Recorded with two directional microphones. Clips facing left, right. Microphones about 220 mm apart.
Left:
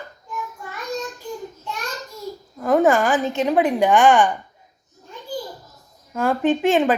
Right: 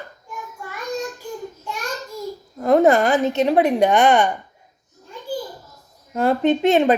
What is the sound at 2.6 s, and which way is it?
A woman's voice, 20° right (ahead or behind).